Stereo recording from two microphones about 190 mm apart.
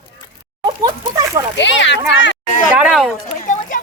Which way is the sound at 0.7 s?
20° right (ahead or behind).